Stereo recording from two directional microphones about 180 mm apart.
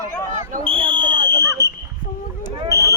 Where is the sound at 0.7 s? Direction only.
30° right (ahead or behind).